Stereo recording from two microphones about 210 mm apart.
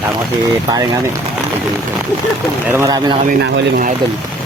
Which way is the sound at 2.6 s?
15° right (ahead or behind).